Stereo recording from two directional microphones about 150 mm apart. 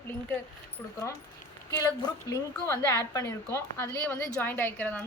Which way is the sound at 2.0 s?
20° left (ahead or behind).